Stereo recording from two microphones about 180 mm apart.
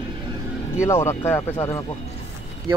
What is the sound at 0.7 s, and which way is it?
Speech, 15° left (ahead or behind).